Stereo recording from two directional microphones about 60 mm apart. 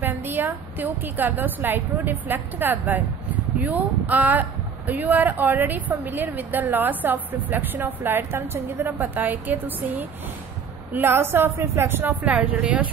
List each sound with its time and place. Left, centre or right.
0.0 s a sound: right
0.7 s speech: right
11.6 s speech: right
12.3 s speech: right